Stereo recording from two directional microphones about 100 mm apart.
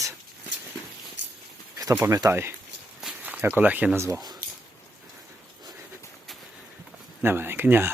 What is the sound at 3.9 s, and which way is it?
Speech, 30° right (ahead or behind).